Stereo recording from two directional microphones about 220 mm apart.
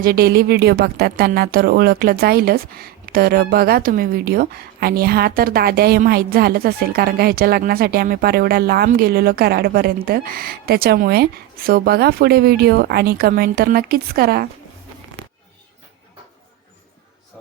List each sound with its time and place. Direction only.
0.0 s speech: 45° right (ahead or behind)